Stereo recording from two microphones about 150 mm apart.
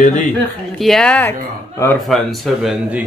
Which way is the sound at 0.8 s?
5° left (ahead or behind).